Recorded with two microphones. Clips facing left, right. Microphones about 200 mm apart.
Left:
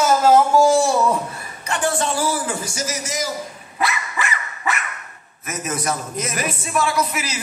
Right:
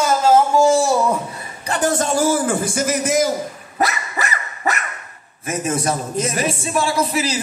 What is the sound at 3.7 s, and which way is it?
Dog, 40° right (ahead or behind).